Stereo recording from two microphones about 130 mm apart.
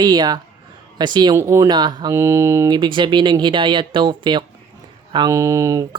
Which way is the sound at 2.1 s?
20° right (ahead or behind).